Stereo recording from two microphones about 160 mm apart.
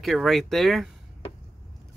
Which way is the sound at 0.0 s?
Centre (ahead or behind).